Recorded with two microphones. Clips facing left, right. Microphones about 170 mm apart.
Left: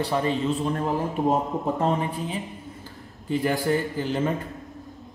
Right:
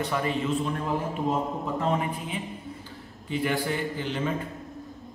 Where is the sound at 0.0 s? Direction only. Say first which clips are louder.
Left 3 dB; 30° left (ahead or behind).